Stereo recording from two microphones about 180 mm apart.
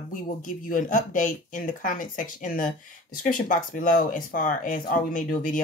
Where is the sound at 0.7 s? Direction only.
45° left (ahead or behind).